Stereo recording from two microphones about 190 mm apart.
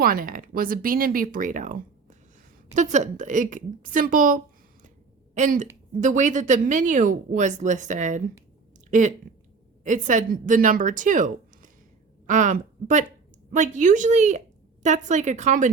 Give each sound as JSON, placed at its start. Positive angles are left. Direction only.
{"t": 0.0, "sound": "speech", "side_deg": -50}